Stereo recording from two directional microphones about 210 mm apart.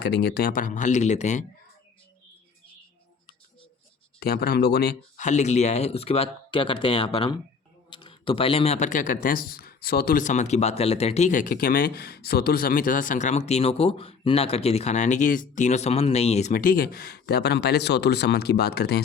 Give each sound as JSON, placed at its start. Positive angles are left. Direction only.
{"t": 0.0, "sound": "speech", "side_deg": 50}
{"t": 4.2, "sound": "speech", "side_deg": 50}